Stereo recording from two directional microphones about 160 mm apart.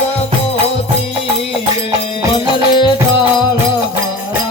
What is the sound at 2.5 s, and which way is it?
Music, 30° left (ahead or behind).